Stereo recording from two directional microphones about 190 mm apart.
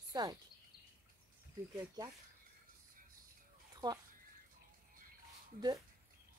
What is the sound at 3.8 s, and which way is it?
Speech, 25° right (ahead or behind).